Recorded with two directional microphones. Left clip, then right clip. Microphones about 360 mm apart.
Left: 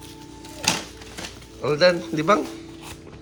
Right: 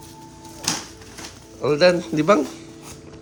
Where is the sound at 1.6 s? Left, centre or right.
Centre.